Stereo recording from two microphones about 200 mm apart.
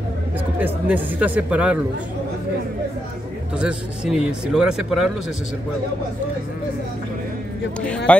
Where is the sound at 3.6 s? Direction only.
5° right (ahead or behind).